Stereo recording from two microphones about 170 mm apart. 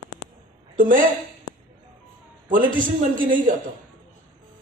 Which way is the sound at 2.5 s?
50° right (ahead or behind).